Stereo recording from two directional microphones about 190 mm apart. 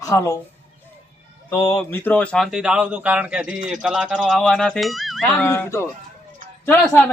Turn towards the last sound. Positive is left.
turn(degrees=10)  # may be behind; listen again after turning